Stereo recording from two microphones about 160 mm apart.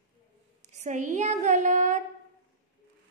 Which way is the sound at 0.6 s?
45° right (ahead or behind).